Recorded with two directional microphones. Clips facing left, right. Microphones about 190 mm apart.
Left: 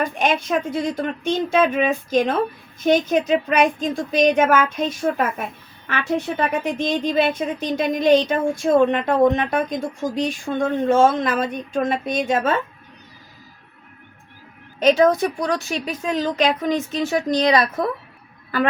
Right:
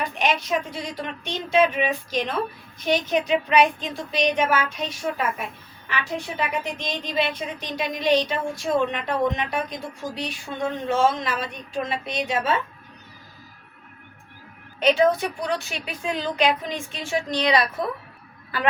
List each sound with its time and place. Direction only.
0.0 s a woman's voice: 50° left (ahead or behind)
14.8 s a woman's voice: 40° left (ahead or behind)